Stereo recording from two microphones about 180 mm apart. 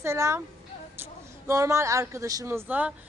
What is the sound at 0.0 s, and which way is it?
Speech, 15° right (ahead or behind).